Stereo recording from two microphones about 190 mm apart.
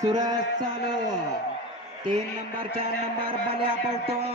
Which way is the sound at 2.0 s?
25° right (ahead or behind).